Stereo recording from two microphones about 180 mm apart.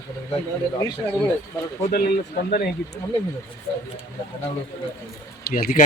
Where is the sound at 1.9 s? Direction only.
55° left (ahead or behind).